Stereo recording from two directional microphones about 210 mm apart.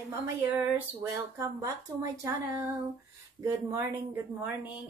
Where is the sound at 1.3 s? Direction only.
15° right (ahead or behind).